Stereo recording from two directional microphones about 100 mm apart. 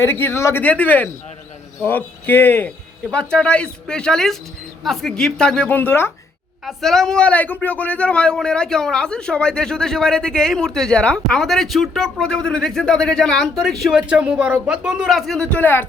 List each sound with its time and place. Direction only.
0.0 s a man's voice: 20° left (ahead or behind); by 5.6 s 5° left (ahead or behind)
5.6 s speech: 20° left (ahead or behind)
6.7 s a man's voice: centre (ahead or behind)
15.4 s a man's voice: 15° left (ahead or behind)